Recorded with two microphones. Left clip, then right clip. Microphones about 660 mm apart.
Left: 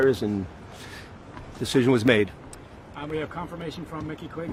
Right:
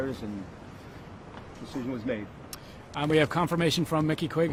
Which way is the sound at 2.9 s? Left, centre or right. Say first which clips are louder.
Right 7 dB; right.